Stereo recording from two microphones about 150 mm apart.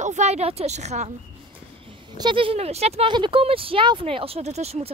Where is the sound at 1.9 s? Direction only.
30° right (ahead or behind).